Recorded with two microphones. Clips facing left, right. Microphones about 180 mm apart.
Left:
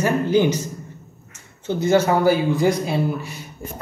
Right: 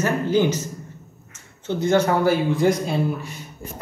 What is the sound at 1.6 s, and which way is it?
A man's voice, 5° left (ahead or behind).